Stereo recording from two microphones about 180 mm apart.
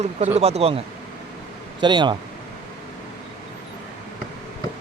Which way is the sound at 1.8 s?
25° right (ahead or behind).